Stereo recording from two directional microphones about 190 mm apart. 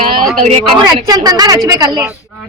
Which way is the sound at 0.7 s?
20° right (ahead or behind).